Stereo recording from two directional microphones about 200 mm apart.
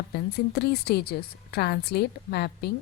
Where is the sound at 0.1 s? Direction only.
55° left (ahead or behind).